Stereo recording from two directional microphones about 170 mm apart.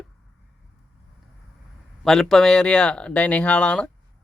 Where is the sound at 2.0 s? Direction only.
Centre (ahead or behind).